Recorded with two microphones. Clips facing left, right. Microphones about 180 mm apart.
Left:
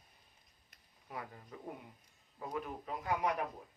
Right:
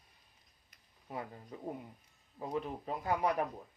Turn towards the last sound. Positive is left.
turn(degrees=-30)  # may be behind; listen again after turning